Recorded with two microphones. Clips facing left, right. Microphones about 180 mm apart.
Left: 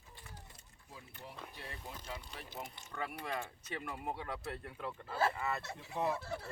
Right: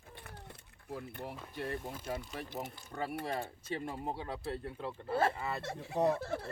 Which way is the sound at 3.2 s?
35° right (ahead or behind).